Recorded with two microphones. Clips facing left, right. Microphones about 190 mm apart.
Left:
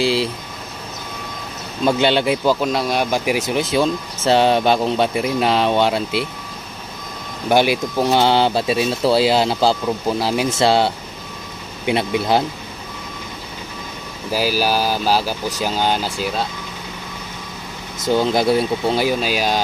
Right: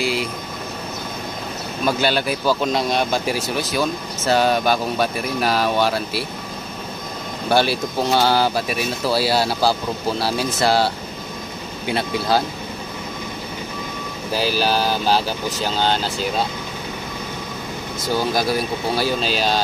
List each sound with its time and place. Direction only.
0.0 s speech: 30° left (ahead or behind)
1.9 s speech: 25° left (ahead or behind)
2.6 s speech: 5° left (ahead or behind); by 6.2 s 20° left (ahead or behind)
7.4 s speech: 15° left (ahead or behind)
14.3 s speech: 10° left (ahead or behind)
18.0 s speech: 20° left (ahead or behind)
19.0 s speech: 10° left (ahead or behind)